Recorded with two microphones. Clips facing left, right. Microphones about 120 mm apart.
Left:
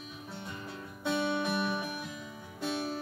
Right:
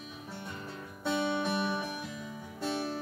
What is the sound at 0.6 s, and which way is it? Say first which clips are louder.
Music: even; 10° left (ahead or behind).